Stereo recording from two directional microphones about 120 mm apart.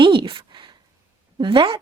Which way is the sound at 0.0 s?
45° right (ahead or behind).